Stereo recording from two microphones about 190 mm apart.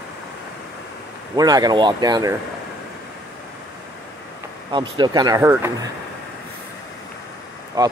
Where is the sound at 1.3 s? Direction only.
20° right (ahead or behind).